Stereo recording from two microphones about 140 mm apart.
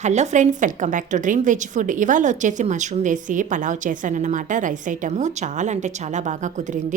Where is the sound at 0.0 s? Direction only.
55° right (ahead or behind).